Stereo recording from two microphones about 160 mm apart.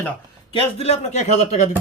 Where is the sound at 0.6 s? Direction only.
40° left (ahead or behind).